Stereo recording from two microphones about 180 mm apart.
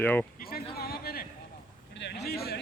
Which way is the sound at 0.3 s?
55° left (ahead or behind).